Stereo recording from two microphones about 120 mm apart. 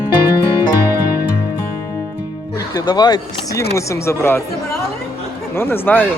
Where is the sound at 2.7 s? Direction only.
35° left (ahead or behind).